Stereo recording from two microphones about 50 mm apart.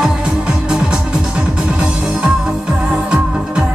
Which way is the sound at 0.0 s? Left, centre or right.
Centre.